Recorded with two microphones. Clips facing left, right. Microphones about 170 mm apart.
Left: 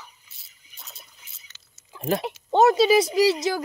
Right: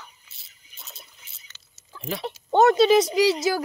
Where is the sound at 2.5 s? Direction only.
5° left (ahead or behind).